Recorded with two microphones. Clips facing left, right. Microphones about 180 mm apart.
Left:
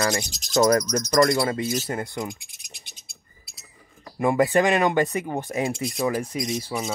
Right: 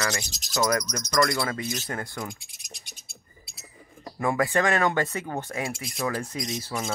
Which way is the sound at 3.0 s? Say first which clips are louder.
Right 4 dB; centre (ahead or behind).